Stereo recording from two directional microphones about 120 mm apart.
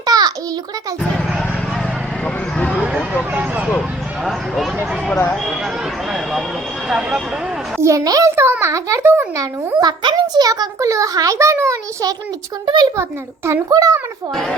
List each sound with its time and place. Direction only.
0.0 s a sound: 35° right (ahead or behind)
2.2 s a sound: 5° left (ahead or behind)
2.8 s a sound: 10° right (ahead or behind)
3.3 s speech: 10° right (ahead or behind)
3.8 s speech: centre (ahead or behind)
6.1 s speech: 5° right (ahead or behind)
7.8 s a child's voice: 25° right (ahead or behind)
12.6 s speech: 40° right (ahead or behind)
13.0 s a child's voice: 25° right (ahead or behind)